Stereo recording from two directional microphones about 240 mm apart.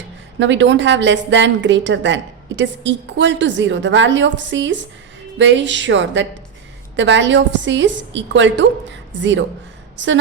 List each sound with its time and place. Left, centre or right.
0.3 s a woman's voice: right